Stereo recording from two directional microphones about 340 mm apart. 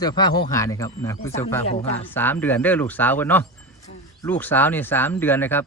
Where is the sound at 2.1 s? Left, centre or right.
Centre.